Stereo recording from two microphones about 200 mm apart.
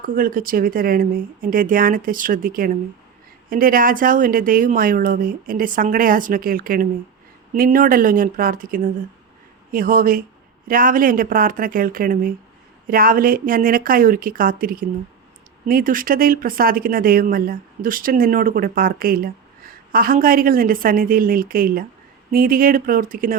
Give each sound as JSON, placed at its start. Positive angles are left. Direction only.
{"t": 0.0, "sound": "speech", "side_deg": -45}